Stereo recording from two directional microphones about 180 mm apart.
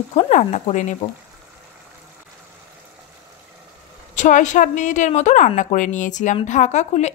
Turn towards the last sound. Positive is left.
turn(degrees=40)  # may be behind; listen again after turning